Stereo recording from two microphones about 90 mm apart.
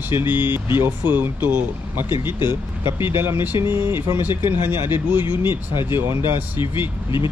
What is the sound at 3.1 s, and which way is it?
Speech, 25° right (ahead or behind).